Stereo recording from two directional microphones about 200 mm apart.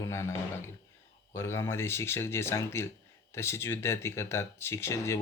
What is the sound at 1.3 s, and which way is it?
Speech, 15° left (ahead or behind).